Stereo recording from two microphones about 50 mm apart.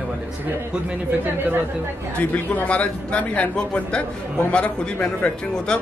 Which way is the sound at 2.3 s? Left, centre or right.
Left.